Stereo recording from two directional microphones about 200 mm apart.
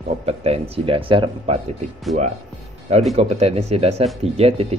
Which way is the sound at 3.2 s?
30° right (ahead or behind).